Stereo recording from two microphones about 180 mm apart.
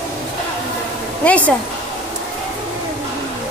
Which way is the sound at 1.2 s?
10° left (ahead or behind).